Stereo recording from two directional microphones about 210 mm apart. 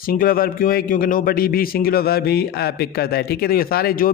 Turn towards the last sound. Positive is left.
turn(degrees=45)  # may be behind; listen again after turning